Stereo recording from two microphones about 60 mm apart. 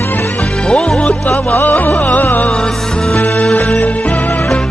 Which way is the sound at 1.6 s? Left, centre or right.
Left.